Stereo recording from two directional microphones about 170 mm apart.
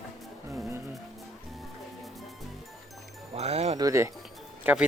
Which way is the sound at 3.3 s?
40° right (ahead or behind).